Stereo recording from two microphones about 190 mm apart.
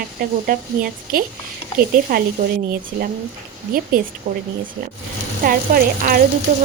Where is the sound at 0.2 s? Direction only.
50° right (ahead or behind).